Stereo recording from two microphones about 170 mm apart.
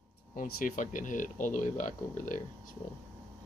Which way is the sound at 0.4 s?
50° left (ahead or behind).